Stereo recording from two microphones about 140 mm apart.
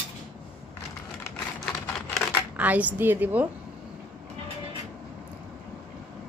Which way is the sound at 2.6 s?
10° right (ahead or behind).